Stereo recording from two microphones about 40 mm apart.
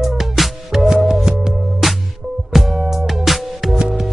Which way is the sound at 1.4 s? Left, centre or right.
Centre.